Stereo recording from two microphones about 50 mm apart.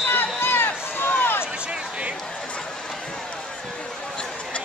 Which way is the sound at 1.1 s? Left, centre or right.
Left.